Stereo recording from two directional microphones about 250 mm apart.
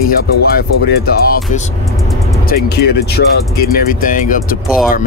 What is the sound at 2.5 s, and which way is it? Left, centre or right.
Speech, left.